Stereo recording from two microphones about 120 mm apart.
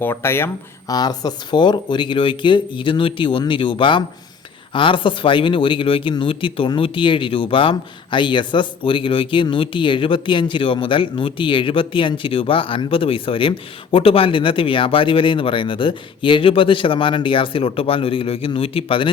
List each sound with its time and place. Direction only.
0.0 s speech: 20° left (ahead or behind)
0.9 s a man's voice: 35° left (ahead or behind)